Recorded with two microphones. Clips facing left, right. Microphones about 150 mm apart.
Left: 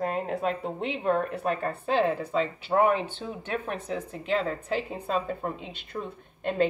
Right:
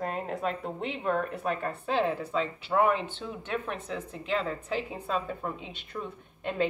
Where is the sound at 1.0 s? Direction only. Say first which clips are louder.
Left 3 dB; 35° left (ahead or behind).